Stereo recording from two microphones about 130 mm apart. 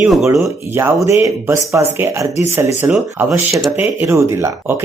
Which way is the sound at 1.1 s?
25° right (ahead or behind).